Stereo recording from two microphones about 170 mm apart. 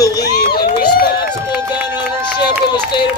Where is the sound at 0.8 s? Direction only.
60° left (ahead or behind).